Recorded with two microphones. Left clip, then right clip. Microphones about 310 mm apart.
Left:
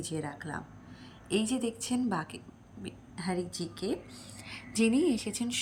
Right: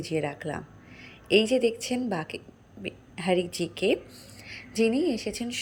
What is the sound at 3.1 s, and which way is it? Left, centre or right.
Speech, centre.